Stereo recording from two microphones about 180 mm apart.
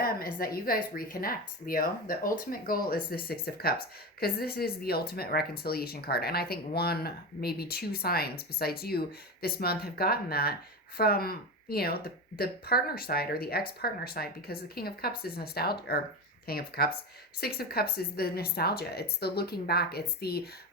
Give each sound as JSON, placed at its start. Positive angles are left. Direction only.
{"t": 0.0, "sound": "speech", "side_deg": 55}